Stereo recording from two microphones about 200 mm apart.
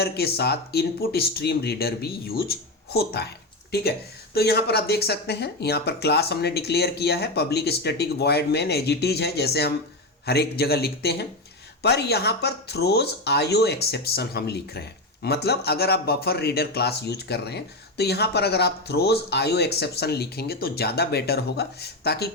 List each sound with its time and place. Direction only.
0.0 s speech: 55° left (ahead or behind)